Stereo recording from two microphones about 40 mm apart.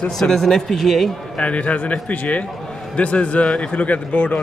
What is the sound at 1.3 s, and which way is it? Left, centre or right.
A man's voice, left.